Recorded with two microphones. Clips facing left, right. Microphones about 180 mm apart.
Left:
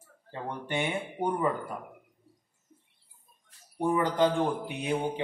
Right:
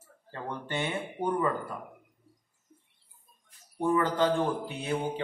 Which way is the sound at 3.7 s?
15° left (ahead or behind).